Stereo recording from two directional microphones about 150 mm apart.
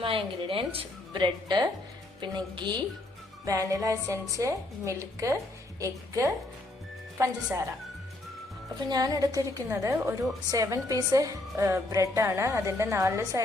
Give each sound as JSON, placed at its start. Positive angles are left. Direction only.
{"t": 0.0, "sound": "a woman's voice", "side_deg": -35}
{"t": 8.9, "sound": "a woman's voice", "side_deg": -25}